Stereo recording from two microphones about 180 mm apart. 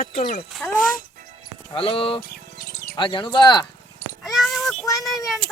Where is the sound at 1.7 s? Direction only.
30° left (ahead or behind).